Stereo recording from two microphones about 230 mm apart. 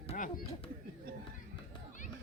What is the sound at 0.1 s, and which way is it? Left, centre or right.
Speech, left.